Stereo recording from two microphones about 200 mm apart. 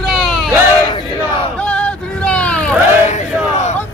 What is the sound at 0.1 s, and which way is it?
Crowd, centre (ahead or behind).